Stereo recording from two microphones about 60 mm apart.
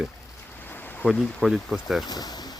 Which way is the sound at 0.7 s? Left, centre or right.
Left.